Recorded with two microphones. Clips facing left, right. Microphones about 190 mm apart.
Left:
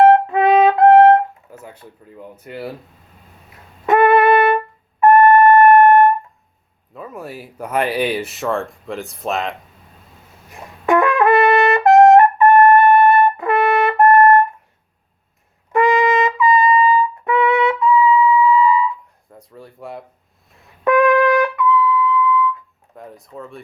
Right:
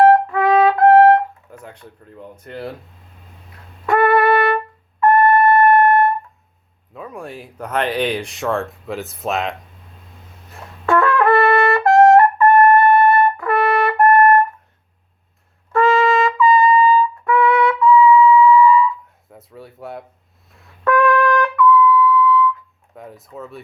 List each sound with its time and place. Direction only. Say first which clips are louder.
0.0 s brass instrument: left 1 dB; 20° left (ahead or behind)
1.6 s speech: even; 5° left (ahead or behind)
3.8 s trumpet: left 2 dB; 20° left (ahead or behind)
6.9 s speech: even; centre (ahead or behind)
10.5 s trumpet: left 2 dB; 15° left (ahead or behind)
15.7 s trumpet: even; 15° left (ahead or behind)
19.3 s a sound: right 1 dB; 5° right (ahead or behind)
20.8 s trumpet: left 2 dB; 15° left (ahead or behind)
23.0 s a sound: even; centre (ahead or behind)